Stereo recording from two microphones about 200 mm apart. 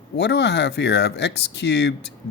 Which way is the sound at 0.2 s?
60° left (ahead or behind).